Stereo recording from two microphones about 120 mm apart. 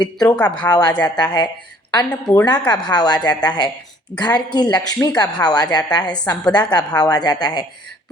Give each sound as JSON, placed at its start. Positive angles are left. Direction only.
{"t": 0.0, "sound": "a woman's voice", "side_deg": 35}
{"t": 0.3, "sound": "speech", "side_deg": 10}
{"t": 0.6, "sound": "a woman's voice", "side_deg": 35}